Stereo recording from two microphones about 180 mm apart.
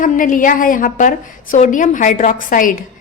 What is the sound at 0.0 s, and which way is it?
A woman's voice, 45° left (ahead or behind).